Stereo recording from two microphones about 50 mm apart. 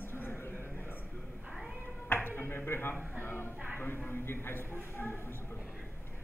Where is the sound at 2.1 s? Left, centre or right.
Left.